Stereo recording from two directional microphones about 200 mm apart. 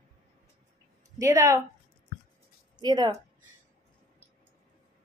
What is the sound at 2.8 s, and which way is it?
Speech, 20° right (ahead or behind).